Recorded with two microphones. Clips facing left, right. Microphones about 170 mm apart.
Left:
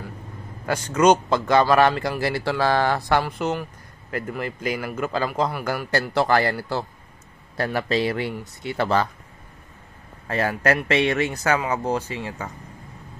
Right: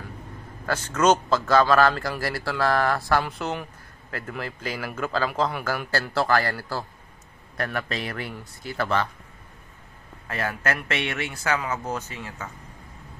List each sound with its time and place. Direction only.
0.7 s a man's voice: 15° left (ahead or behind); by 9.1 s 35° left (ahead or behind)
10.2 s speech: 35° left (ahead or behind)